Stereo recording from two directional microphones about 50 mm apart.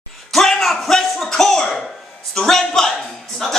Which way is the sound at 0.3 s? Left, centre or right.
Centre.